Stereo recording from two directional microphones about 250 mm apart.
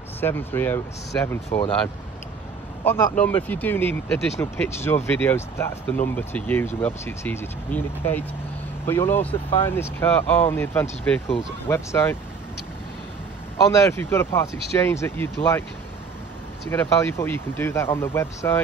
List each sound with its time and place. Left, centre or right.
0.2 s speech: centre
2.8 s speech: centre
9.3 s speech: left
9.8 s speech: centre
13.7 s speech: centre
16.7 s speech: centre